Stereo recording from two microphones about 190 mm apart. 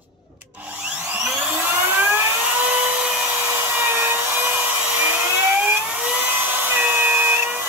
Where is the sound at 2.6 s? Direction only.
5° right (ahead or behind).